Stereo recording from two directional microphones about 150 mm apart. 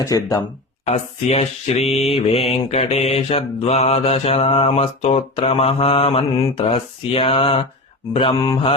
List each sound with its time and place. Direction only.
0.0 s speech: 25° left (ahead or behind)
0.9 s mantra: 45° left (ahead or behind)